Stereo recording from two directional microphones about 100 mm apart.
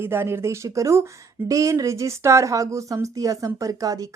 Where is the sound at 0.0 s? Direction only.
25° right (ahead or behind).